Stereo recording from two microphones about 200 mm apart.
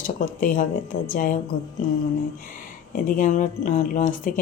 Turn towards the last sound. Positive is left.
turn(degrees=45)  # may be behind; listen again after turning